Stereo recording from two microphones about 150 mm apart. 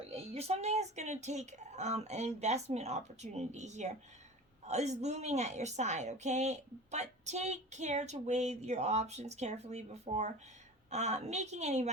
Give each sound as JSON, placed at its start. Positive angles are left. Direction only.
{"t": 0.1, "sound": "a woman's voice", "side_deg": -45}